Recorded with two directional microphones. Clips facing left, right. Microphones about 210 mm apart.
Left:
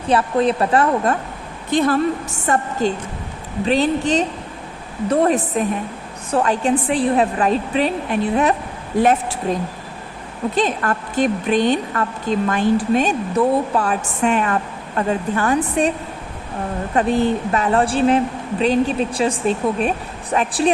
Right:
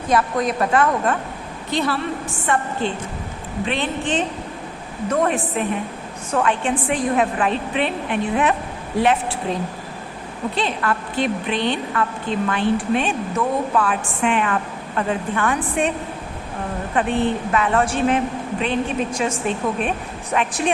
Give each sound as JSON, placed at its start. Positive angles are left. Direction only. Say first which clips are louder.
{"t": 0.1, "sound": "a woman's voice", "louder": "left 3 dB", "side_deg": 30}
{"t": 1.7, "sound": "a woman's voice", "louder": "left 6 dB", "side_deg": 50}
{"t": 10.5, "sound": "a woman's voice", "louder": "left 3 dB", "side_deg": 45}
{"t": 16.9, "sound": "a woman's voice", "louder": "left 3 dB", "side_deg": 40}